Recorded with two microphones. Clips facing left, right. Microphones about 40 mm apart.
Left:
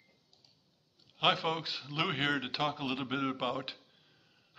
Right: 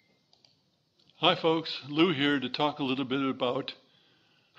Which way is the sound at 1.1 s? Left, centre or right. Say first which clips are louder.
Right 5 dB; centre.